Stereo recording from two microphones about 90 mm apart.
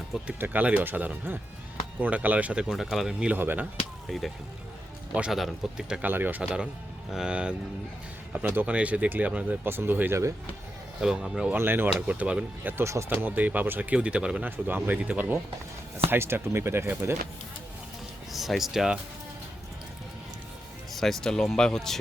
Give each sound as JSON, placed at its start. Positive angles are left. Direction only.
{"t": 0.3, "sound": "speech", "side_deg": -20}
{"t": 3.3, "sound": "speech", "side_deg": -20}
{"t": 5.3, "sound": "speech", "side_deg": -5}
{"t": 6.0, "sound": "speech", "side_deg": -20}
{"t": 11.0, "sound": "speech", "side_deg": -10}
{"t": 11.5, "sound": "speech", "side_deg": -25}
{"t": 11.9, "sound": "speech", "side_deg": -15}
{"t": 12.7, "sound": "speech", "side_deg": -30}
{"t": 13.1, "sound": "speech", "side_deg": -20}
{"t": 18.3, "sound": "speech", "side_deg": 0}
{"t": 20.9, "sound": "speech", "side_deg": 5}